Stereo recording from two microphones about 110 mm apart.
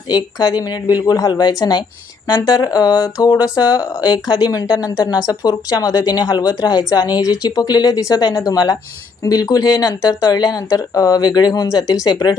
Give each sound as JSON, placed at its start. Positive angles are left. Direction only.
{"t": 0.1, "sound": "speech", "side_deg": 35}